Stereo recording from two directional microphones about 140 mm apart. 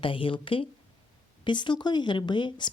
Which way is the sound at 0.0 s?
40° left (ahead or behind).